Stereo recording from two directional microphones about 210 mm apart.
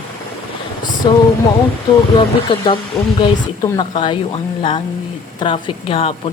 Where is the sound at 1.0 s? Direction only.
25° left (ahead or behind).